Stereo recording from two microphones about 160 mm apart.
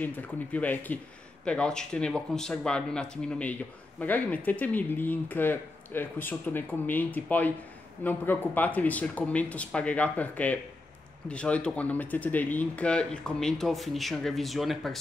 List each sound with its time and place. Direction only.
0.0 s speech: 10° left (ahead or behind)